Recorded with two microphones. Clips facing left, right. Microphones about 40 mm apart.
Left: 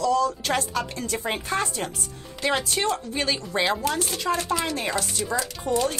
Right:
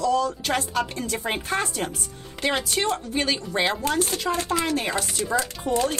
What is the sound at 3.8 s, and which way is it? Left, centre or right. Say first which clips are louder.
Chopping: right 2 dB; right.